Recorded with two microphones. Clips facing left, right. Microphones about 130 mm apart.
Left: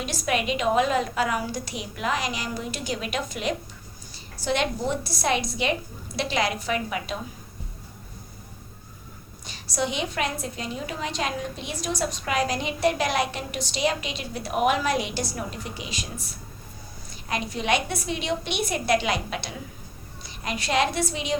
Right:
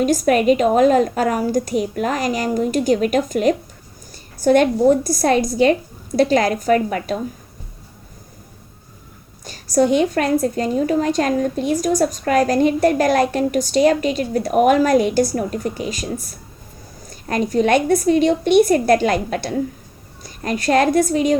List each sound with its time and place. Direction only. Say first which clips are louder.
0.0 s a woman's voice: right 12 dB; 45° right (ahead or behind)
9.5 s a woman's voice: right 13 dB; 45° right (ahead or behind)